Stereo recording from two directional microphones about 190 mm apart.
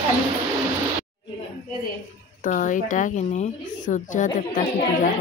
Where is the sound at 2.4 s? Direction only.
45° left (ahead or behind).